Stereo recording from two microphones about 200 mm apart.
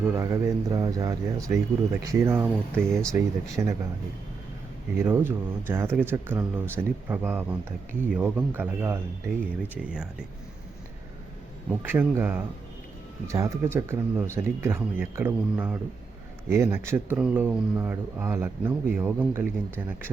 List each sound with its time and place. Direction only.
0.2 s speech: 15° right (ahead or behind)
4.9 s speech: 10° right (ahead or behind)
11.8 s speech: 10° right (ahead or behind)